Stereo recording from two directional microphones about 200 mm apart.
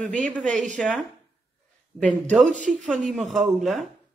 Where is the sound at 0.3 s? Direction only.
5° left (ahead or behind).